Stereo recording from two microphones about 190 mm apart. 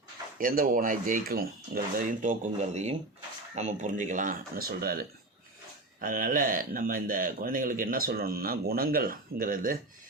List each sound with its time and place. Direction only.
0.3 s speech: 50° right (ahead or behind)